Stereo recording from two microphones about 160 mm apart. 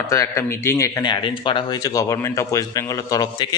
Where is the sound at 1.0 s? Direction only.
30° left (ahead or behind).